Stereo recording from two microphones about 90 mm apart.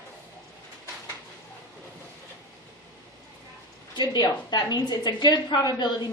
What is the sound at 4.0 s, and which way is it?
A woman's voice, 50° left (ahead or behind).